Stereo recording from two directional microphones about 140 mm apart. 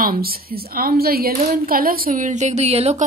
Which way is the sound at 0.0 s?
90° right.